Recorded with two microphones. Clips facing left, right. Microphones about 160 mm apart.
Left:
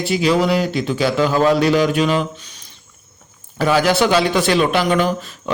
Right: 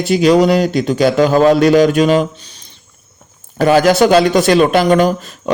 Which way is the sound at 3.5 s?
45° right (ahead or behind).